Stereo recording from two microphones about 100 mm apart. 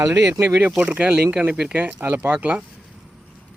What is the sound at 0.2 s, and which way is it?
Speech, 20° right (ahead or behind).